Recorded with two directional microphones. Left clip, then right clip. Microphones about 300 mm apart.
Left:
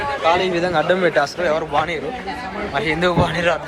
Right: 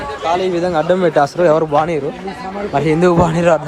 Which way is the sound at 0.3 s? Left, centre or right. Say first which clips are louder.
Right 2 dB; centre.